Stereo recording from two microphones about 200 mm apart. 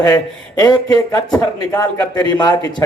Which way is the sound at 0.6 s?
20° left (ahead or behind).